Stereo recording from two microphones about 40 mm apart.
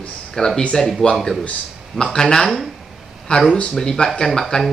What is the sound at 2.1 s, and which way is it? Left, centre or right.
Speech, left.